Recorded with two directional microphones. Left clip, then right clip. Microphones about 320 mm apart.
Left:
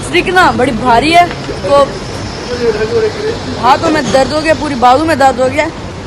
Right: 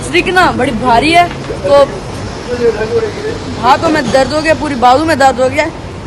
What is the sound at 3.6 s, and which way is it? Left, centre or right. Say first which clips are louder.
A man's voice: even; centre.